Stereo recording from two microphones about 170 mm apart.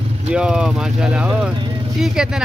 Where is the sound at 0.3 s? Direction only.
5° right (ahead or behind).